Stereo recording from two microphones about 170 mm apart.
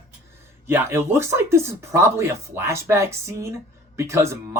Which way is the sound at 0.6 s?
15° right (ahead or behind).